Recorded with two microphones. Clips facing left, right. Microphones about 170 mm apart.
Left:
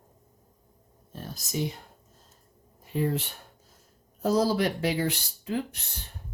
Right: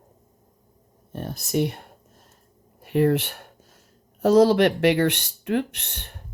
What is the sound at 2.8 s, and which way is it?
Speech, 70° right (ahead or behind).